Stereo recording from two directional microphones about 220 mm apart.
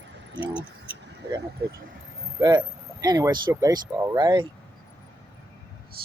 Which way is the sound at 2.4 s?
20° right (ahead or behind).